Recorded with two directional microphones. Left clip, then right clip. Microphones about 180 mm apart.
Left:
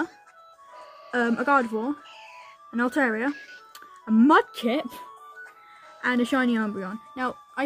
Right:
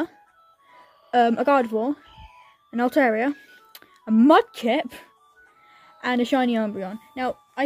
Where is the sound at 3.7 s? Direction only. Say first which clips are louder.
Right 2 dB; 15° right (ahead or behind).